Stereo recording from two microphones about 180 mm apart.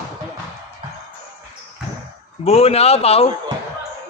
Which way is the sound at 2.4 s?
35° left (ahead or behind).